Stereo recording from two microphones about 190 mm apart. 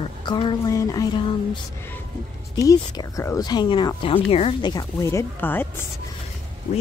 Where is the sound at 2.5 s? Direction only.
20° left (ahead or behind).